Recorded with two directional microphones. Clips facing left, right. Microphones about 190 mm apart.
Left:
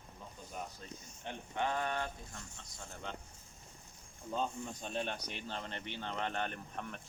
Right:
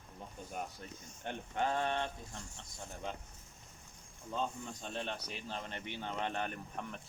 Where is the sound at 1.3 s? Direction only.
55° right (ahead or behind).